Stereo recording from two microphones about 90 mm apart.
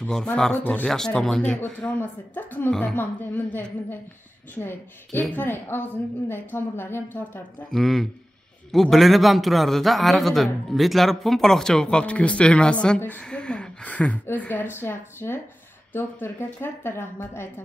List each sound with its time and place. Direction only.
0.1 s a man's voice: 5° left (ahead or behind)
2.7 s a woman's voice: 10° left (ahead or behind)
7.7 s a man's voice: 5° left (ahead or behind); by 17.5 s 25° left (ahead or behind)